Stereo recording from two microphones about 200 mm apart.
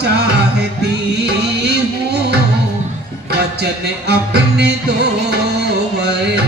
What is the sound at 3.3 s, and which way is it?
Music, 55° right (ahead or behind).